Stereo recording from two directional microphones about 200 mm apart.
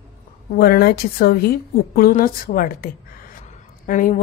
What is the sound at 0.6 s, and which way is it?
A woman's voice, 50° left (ahead or behind).